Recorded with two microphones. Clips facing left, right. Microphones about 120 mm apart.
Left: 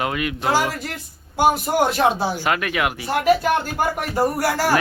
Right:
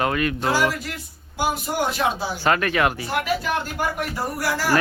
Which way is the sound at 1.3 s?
50° left (ahead or behind).